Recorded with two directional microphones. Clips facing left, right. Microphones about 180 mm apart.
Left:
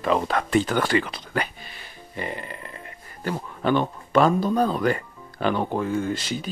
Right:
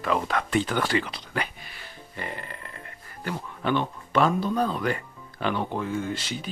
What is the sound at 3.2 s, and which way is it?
Speech, 40° left (ahead or behind).